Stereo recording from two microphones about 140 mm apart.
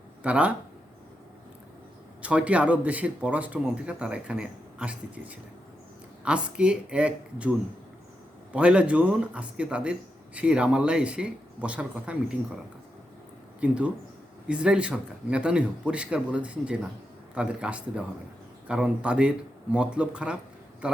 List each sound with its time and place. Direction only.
0.2 s speech: 10° right (ahead or behind)
2.2 s a man's voice: 10° right (ahead or behind)
8.5 s a man's voice: 10° right (ahead or behind)
13.6 s a man's voice: 10° right (ahead or behind)